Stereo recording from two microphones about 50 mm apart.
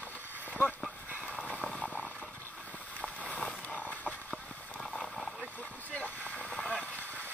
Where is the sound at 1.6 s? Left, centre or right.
Centre.